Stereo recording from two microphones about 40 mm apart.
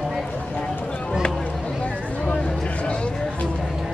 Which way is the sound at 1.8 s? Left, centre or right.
Left.